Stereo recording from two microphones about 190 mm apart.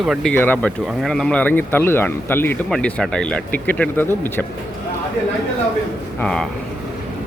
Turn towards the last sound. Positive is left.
turn(degrees=5)  # may be behind; listen again after turning